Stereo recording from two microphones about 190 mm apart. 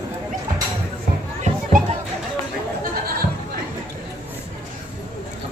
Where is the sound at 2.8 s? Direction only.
50° right (ahead or behind).